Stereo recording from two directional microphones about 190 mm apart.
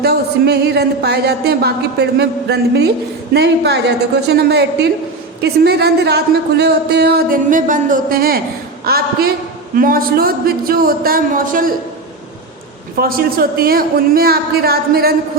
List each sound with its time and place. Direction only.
0.0 s a woman's voice: 55° right (ahead or behind)
13.0 s a woman's voice: 50° right (ahead or behind)